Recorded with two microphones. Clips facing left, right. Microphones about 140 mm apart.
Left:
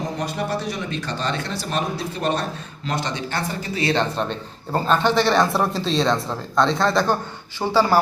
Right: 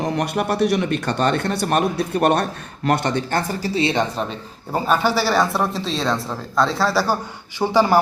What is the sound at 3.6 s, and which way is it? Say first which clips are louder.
Speech: right 5 dB; 35° right (ahead or behind).